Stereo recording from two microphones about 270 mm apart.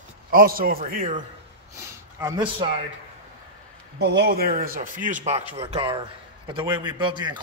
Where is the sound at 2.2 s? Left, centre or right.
Centre.